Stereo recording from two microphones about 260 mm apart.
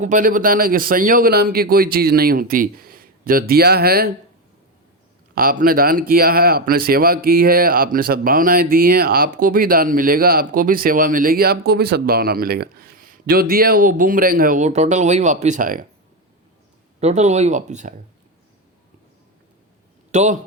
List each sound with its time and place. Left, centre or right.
0.0 s speech: right
5.3 s speech: right
17.0 s speech: right
20.1 s a man's voice: right